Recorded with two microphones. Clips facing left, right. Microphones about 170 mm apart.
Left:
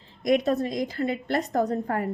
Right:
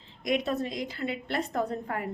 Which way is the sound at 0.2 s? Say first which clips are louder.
Left 6 dB; 40° left (ahead or behind).